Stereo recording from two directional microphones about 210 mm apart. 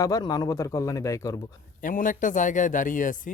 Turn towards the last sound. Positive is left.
turn(degrees=40)  # may be behind; listen again after turning